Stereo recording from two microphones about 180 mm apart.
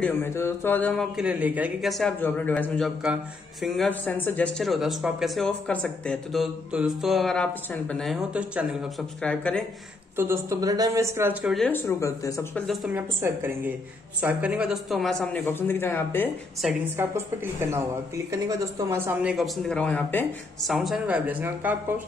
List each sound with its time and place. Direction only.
0.0 s mantra: 15° left (ahead or behind)
1.1 s speech: 5° right (ahead or behind)
9.2 s mantra: 5° left (ahead or behind)
10.1 s speech: 15° right (ahead or behind)
11.5 s speech: 5° left (ahead or behind)
12.0 s speech: 20° left (ahead or behind)
12.5 s speech: centre (ahead or behind)
12.9 s speech: 10° right (ahead or behind); by 16.3 s 10° left (ahead or behind)
17.0 s speech: 15° right (ahead or behind)
19.3 s mantra: centre (ahead or behind)
20.6 s speech: centre (ahead or behind)